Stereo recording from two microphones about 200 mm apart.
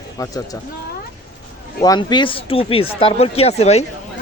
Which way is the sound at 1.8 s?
20° left (ahead or behind).